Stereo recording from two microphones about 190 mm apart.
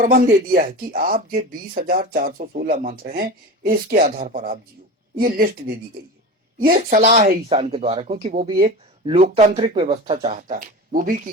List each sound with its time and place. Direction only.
0.0 s speech: 45° right (ahead or behind)